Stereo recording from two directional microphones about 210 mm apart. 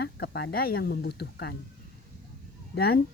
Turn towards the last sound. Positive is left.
turn(degrees=50)  # may be behind; listen again after turning